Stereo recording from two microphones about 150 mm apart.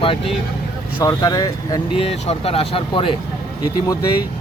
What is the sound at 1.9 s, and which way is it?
Speech, 40° left (ahead or behind).